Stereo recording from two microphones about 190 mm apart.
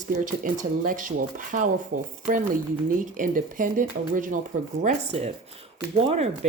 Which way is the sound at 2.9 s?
45° right (ahead or behind).